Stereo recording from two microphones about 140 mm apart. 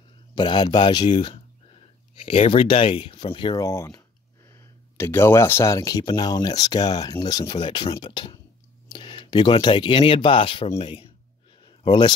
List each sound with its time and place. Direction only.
0.3 s speech: 30° left (ahead or behind)
3.6 s speech: 20° left (ahead or behind); by 11.1 s 40° left (ahead or behind)
11.6 s a sound: 35° left (ahead or behind)